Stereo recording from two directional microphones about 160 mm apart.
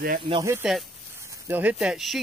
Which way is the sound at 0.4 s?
15° right (ahead or behind).